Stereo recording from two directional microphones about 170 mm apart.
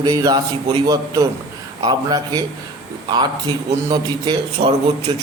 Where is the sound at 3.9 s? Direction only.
25° right (ahead or behind).